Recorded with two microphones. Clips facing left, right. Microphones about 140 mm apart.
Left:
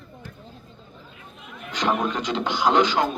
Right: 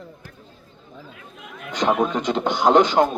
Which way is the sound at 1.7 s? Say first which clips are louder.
Right 4 dB; 50° right (ahead or behind).